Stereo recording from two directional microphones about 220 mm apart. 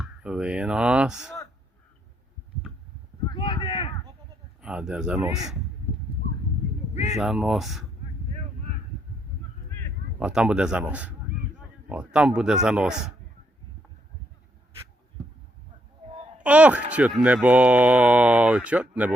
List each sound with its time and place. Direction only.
0.0 s a sound: 5° right (ahead or behind)
3.2 s a sound: 20° left (ahead or behind)
4.6 s speech: 5° right (ahead or behind)
6.9 s speech: 30° left (ahead or behind)
7.2 s speech: centre (ahead or behind)
10.2 s speech: 5° right (ahead or behind)
16.4 s speech: 5° right (ahead or behind)